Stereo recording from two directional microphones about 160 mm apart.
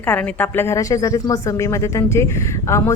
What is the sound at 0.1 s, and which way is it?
A woman's voice, 10° left (ahead or behind).